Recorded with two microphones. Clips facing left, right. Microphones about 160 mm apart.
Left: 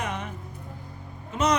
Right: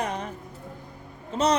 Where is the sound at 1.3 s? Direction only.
30° right (ahead or behind).